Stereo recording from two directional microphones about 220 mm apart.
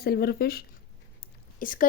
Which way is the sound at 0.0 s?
45° left (ahead or behind).